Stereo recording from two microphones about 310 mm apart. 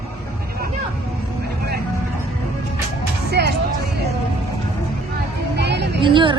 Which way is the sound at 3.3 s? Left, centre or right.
Right.